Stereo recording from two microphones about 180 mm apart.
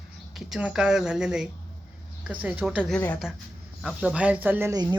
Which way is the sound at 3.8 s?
5° right (ahead or behind).